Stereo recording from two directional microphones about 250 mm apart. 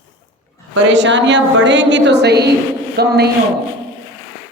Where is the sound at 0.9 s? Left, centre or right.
Right.